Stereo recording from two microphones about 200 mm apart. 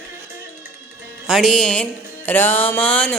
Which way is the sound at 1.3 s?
Centre (ahead or behind).